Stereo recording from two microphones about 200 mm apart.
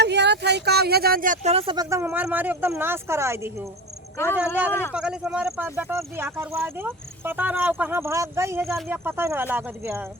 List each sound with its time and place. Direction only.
0.0 s speech: 60° right (ahead or behind); by 3.7 s 10° right (ahead or behind)
4.7 s a man's voice: 10° left (ahead or behind)
4.9 s speech: 5° right (ahead or behind)